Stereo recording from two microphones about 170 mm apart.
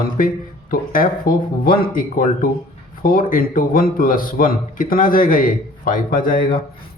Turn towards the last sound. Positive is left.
turn(degrees=55)  # may be behind; listen again after turning